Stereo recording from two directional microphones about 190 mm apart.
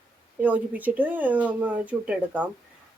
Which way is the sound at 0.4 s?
10° right (ahead or behind).